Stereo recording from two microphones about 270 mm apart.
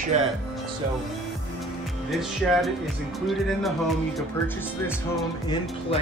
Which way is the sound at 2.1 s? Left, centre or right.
Centre.